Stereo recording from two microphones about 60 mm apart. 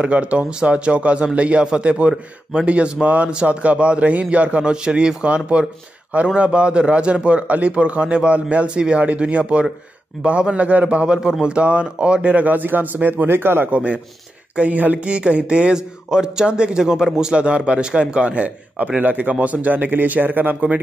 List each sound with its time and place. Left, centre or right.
0.0 s a man's voice: right
13.7 s a man's voice: right